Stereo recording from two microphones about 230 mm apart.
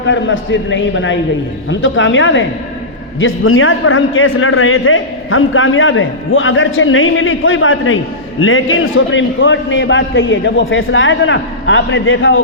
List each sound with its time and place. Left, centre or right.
0.1 s a man's voice: left